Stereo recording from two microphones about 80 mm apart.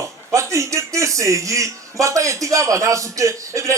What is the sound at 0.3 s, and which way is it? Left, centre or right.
A man's voice, right.